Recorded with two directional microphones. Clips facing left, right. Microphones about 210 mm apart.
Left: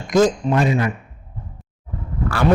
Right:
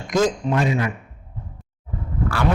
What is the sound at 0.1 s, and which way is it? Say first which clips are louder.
Speech: left 4 dB; 35° left (ahead or behind).